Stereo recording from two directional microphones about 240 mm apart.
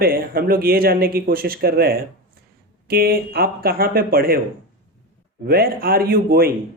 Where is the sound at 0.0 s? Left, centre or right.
Right.